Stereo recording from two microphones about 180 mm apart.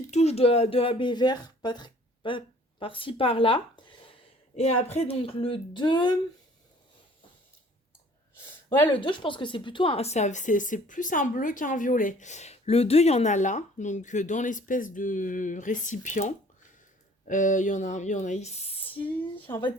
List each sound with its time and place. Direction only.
0.1 s speech: 35° left (ahead or behind)
8.9 s speech: 25° left (ahead or behind); by 16.2 s 45° left (ahead or behind)
17.2 s speech: 45° left (ahead or behind); by 19.7 s 20° left (ahead or behind)